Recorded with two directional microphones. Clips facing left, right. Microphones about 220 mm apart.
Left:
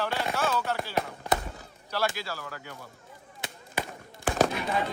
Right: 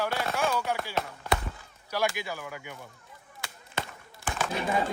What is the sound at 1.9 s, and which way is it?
Speech, 15° right (ahead or behind).